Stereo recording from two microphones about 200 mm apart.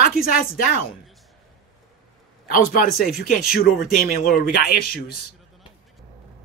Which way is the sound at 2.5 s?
45° left (ahead or behind).